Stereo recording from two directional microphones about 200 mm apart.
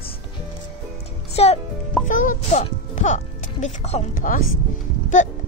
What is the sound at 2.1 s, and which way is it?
Speech, 40° left (ahead or behind).